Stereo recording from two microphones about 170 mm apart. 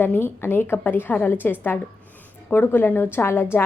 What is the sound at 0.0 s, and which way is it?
A woman's voice, 10° left (ahead or behind).